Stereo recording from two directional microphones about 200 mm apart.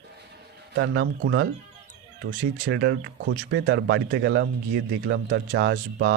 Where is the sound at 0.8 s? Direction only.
60° right (ahead or behind).